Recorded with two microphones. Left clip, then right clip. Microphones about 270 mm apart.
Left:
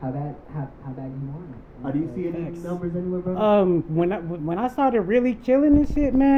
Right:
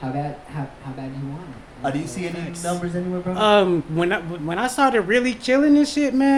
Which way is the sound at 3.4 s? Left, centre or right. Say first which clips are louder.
Right 3 dB; centre.